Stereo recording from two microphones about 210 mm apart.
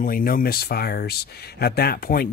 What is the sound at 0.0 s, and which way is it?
Speech, 40° left (ahead or behind).